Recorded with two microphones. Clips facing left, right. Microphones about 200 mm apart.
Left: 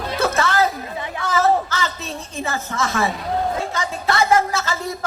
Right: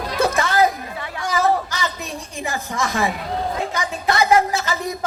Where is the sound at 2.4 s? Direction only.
15° right (ahead or behind).